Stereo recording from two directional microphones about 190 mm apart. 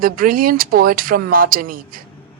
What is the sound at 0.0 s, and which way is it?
Speech, 50° right (ahead or behind).